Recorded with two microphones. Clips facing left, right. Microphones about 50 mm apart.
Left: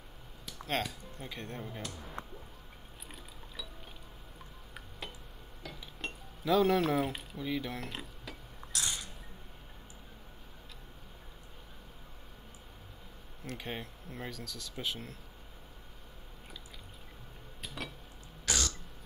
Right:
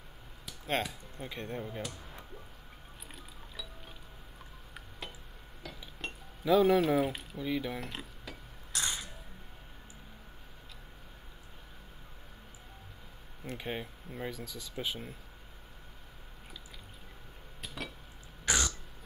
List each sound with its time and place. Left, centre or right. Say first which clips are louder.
0.5 s speech: right 1 dB; centre
5.6 s chink: even; centre
8.8 s a sound: right 2 dB; centre
13.4 s speech: right 2 dB; centre
17.6 s dishes: even; centre
18.4 s throat clearing: right 3 dB; centre